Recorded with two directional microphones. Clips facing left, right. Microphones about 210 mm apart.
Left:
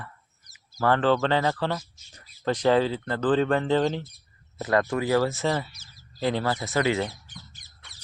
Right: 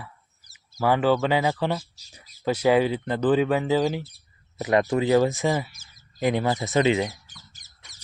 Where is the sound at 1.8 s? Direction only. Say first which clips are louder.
Right 2 dB; 35° right (ahead or behind).